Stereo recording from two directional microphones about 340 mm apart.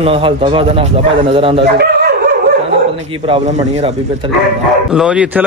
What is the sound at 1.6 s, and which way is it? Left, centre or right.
Dog, right.